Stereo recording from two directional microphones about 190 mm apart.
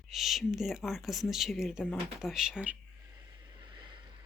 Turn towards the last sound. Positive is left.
turn(degrees=-25)  # may be behind; listen again after turning